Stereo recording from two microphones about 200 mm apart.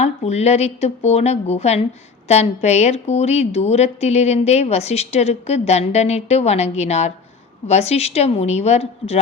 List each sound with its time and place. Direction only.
0.0 s speech: 35° left (ahead or behind)